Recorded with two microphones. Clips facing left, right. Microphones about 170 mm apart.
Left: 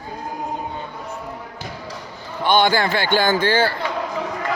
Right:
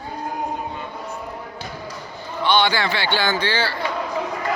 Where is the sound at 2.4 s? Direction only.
45° left (ahead or behind).